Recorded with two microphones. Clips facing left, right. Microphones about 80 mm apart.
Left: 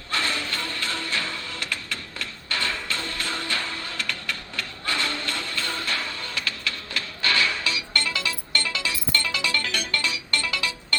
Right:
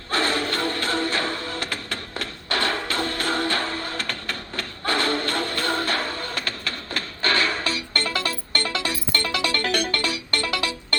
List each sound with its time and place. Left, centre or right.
0.1 s music: right